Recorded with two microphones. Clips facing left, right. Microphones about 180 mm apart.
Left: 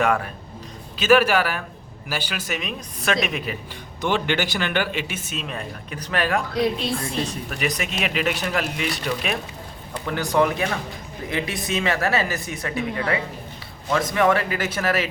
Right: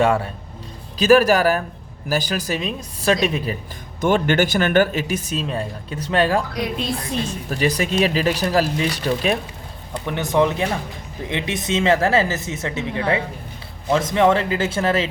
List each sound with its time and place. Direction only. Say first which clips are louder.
0.0 s speech: right 3 dB; 30° right (ahead or behind)
4.0 s speech: right 5 dB; 45° right (ahead or behind); by 6.4 s 30° right (ahead or behind)
7.5 s speech: right 9 dB; 35° right (ahead or behind)
10.1 s speech: right 2 dB; 20° right (ahead or behind)